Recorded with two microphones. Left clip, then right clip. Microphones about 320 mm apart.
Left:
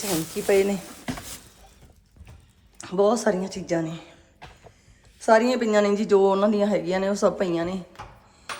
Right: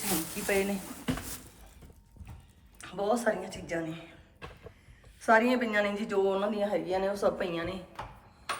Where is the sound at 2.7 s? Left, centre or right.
Centre.